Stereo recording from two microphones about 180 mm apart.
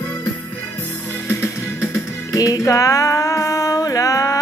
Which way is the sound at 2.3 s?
20° left (ahead or behind).